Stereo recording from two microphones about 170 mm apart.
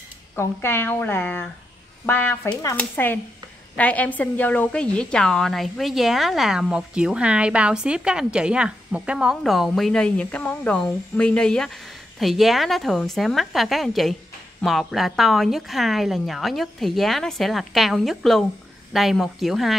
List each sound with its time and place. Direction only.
0.4 s a woman's voice: 15° left (ahead or behind)